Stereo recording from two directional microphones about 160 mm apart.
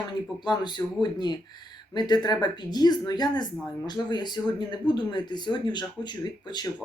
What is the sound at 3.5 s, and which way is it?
Speech, 5° left (ahead or behind).